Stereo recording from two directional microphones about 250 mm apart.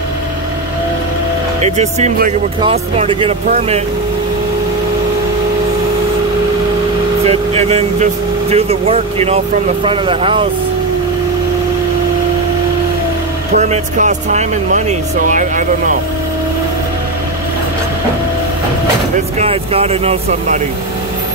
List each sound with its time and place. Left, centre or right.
1.6 s speech: right
7.2 s speech: right
13.5 s speech: right
19.3 s speech: right